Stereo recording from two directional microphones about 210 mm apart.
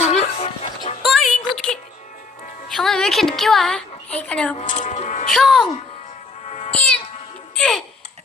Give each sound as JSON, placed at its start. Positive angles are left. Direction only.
{"t": 0.0, "sound": "music", "side_deg": 30}
{"t": 1.0, "sound": "a sound", "side_deg": 0}
{"t": 1.5, "sound": "music", "side_deg": 0}
{"t": 2.6, "sound": "a woman's voice", "side_deg": 0}
{"t": 4.5, "sound": "a sound", "side_deg": 35}
{"t": 5.3, "sound": "speech", "side_deg": 0}
{"t": 6.5, "sound": "cat", "side_deg": 30}
{"t": 6.7, "sound": "speech", "side_deg": 5}
{"t": 7.5, "sound": "music", "side_deg": 5}